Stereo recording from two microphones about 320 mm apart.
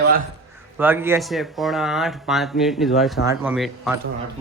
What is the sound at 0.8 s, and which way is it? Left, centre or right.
Speech, centre.